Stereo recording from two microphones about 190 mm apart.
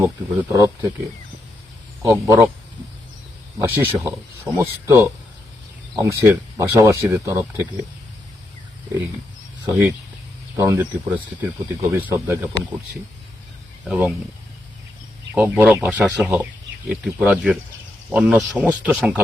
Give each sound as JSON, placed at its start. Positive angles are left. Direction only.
{"t": 0.0, "sound": "speech", "side_deg": -15}
{"t": 2.0, "sound": "speech", "side_deg": -15}
{"t": 3.6, "sound": "speech", "side_deg": -10}
{"t": 9.6, "sound": "speech", "side_deg": -15}
{"t": 13.8, "sound": "speech", "side_deg": -5}
{"t": 15.4, "sound": "speech", "side_deg": -10}